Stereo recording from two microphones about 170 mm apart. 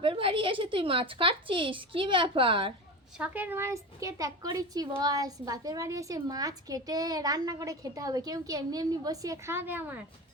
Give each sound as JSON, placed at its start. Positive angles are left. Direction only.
{"t": 0.0, "sound": "a woman's voice", "side_deg": -30}
{"t": 3.2, "sound": "a woman's voice", "side_deg": -10}